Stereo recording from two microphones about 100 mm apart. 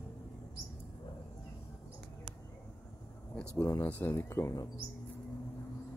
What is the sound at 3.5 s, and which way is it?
Speech, 30° left (ahead or behind).